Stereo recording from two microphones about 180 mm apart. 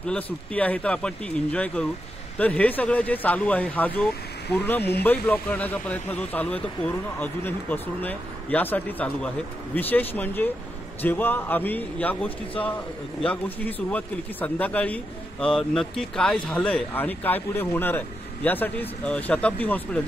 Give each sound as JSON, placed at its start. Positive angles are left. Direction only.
{"t": 0.0, "sound": "speech", "side_deg": 5}